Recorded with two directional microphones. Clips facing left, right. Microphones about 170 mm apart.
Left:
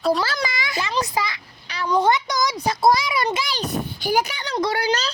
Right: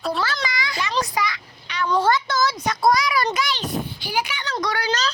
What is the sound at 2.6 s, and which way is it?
Speech, 25° left (ahead or behind).